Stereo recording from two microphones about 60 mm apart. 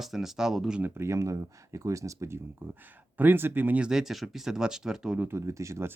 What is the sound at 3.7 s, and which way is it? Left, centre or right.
Speech, centre.